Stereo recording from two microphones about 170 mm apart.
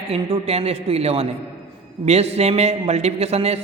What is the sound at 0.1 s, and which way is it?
A man's voice, 35° right (ahead or behind).